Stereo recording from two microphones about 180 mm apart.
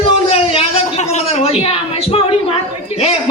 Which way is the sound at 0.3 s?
35° left (ahead or behind).